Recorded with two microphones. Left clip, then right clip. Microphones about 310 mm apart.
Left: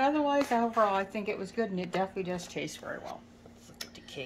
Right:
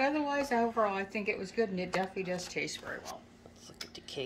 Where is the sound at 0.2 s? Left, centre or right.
Left.